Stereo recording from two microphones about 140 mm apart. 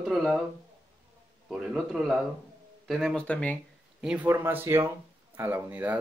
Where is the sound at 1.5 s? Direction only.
5° right (ahead or behind).